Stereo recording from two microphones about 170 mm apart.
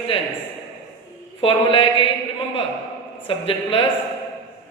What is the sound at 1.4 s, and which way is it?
Speech, 30° left (ahead or behind).